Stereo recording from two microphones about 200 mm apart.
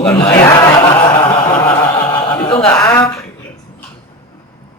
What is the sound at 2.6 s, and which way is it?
Speech, 10° left (ahead or behind).